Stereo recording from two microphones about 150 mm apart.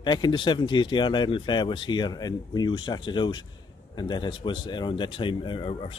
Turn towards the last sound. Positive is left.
turn(degrees=40)  # may be behind; listen again after turning